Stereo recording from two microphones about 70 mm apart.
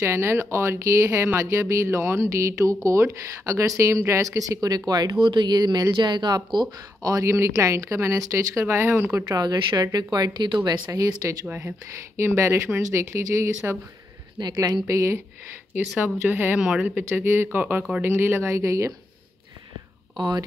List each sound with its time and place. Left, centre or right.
0.0 s speech: right
5.3 s speech: right
9.3 s speech: right
10.9 s speech: right
11.4 s speech: right
12.2 s speech: right
14.4 s a woman's voice: right
14.9 s speech: right
16.0 s speech: right
16.5 s speech: centre
17.1 s speech: right